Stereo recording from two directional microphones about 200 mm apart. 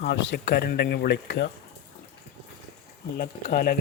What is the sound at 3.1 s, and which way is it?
Speech, 50° left (ahead or behind).